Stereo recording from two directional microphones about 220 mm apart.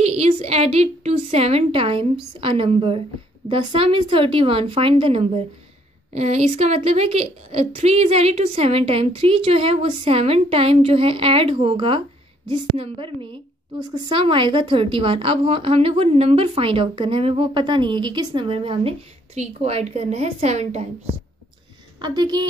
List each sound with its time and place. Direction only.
0.0 s a woman's voice: 30° right (ahead or behind)
22.0 s a woman's voice: 20° right (ahead or behind)